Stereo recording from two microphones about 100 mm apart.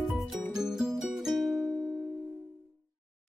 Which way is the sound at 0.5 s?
5° right (ahead or behind).